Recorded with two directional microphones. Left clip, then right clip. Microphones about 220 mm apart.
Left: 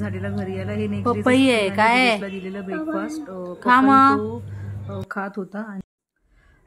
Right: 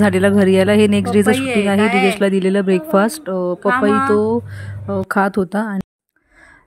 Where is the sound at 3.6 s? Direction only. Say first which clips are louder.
Left 2 dB; 10° left (ahead or behind).